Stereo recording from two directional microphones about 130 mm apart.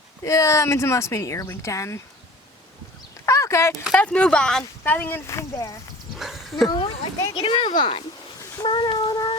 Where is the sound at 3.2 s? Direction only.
25° left (ahead or behind).